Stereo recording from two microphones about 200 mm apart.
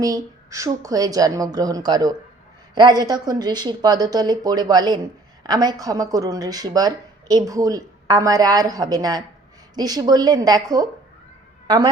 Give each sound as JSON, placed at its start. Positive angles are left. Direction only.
{"t": 0.0, "sound": "a woman's voice", "side_deg": -15}